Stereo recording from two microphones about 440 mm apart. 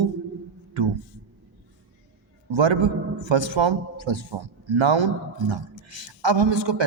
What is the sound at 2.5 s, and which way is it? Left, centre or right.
A man's voice, right.